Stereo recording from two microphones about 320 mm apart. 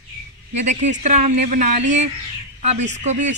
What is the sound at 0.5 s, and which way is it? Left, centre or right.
Speech, right.